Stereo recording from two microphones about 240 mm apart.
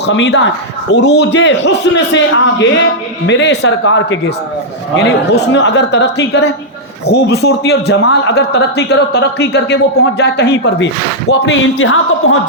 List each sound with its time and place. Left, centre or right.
0.0 s a man's voice: left